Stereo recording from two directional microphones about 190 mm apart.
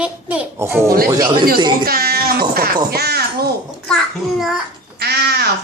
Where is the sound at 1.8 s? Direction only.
55° right (ahead or behind).